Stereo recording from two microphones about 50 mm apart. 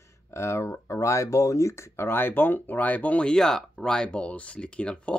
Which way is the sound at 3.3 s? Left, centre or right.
Centre.